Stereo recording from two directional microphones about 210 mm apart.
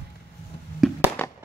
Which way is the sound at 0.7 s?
Centre (ahead or behind).